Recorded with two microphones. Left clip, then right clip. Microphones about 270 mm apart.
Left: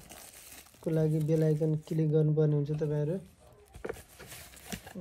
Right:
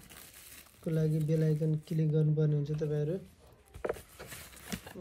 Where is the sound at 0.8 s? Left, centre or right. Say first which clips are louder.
Left 4 dB; centre.